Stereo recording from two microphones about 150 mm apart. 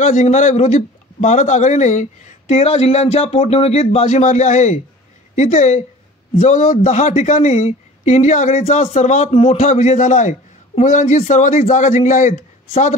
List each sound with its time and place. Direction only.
0.0 s a man's voice: 55° left (ahead or behind)